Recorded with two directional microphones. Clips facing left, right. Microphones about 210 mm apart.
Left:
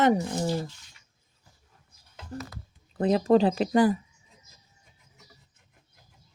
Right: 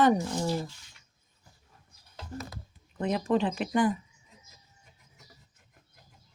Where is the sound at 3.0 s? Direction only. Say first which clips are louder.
Left 6 dB; 35° left (ahead or behind).